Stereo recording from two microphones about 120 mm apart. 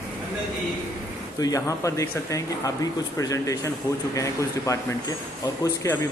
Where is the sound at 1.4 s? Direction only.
30° left (ahead or behind).